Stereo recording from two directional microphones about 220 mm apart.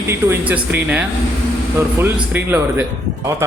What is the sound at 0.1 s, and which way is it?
A man's voice, 10° right (ahead or behind).